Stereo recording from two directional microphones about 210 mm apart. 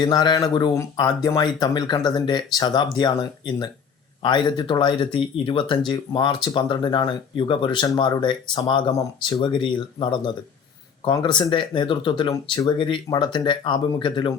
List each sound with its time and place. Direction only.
0.0 s speech: 20° left (ahead or behind)